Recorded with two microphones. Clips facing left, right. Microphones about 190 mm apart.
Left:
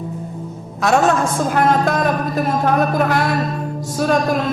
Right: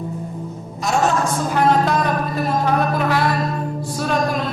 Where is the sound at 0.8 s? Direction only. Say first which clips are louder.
Left 4 dB; 60° left (ahead or behind).